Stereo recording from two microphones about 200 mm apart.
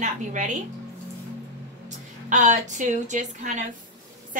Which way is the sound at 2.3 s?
40° right (ahead or behind).